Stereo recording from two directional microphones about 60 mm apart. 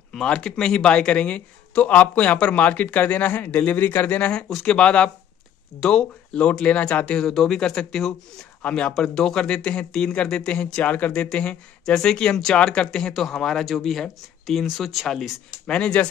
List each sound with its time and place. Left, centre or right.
0.1 s speech: centre
8.6 s speech: centre
11.2 s speech: centre
12.8 s speech: centre
15.7 s speech: centre